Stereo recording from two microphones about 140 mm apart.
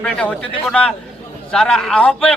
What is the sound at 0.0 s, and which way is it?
A man's voice, 10° left (ahead or behind).